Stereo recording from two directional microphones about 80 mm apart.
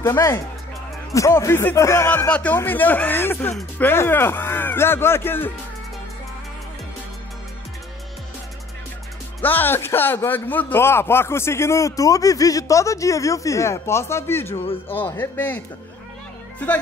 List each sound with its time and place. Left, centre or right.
0.0 s speech: left
2.0 s speech: centre
9.4 s speech: left